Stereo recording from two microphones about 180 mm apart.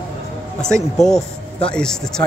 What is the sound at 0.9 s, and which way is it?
Speech, 5° left (ahead or behind).